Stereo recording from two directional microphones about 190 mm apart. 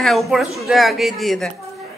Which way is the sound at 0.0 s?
Centre (ahead or behind).